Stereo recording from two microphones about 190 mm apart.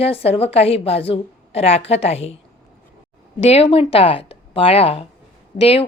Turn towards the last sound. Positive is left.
turn(degrees=30)  # may be behind; listen again after turning